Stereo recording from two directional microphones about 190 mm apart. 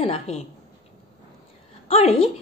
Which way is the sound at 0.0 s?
30° left (ahead or behind).